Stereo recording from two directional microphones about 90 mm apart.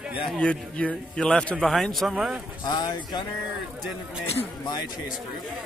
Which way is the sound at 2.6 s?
50° left (ahead or behind).